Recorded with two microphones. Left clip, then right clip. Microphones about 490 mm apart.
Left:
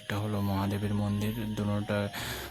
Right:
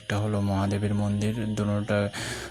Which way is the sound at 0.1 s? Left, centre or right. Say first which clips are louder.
Right 5 dB; left.